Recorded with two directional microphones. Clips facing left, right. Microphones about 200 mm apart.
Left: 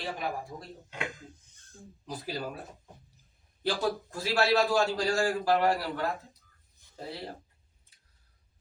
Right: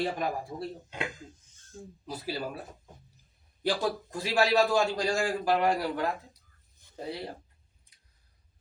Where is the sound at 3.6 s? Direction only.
15° right (ahead or behind).